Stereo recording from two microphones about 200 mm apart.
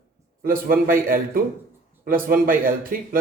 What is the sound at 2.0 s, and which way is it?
Speech, 45° right (ahead or behind).